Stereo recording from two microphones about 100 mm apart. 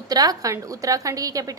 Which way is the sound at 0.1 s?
40° right (ahead or behind).